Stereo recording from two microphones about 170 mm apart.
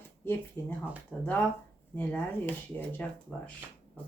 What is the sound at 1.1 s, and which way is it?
Speech, 5° left (ahead or behind).